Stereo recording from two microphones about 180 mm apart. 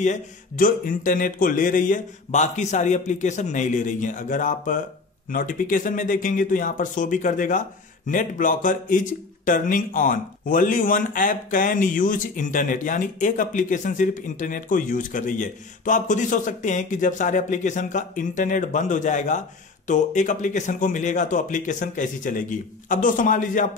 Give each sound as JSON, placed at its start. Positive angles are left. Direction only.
{"t": 0.0, "sound": "speech", "side_deg": 45}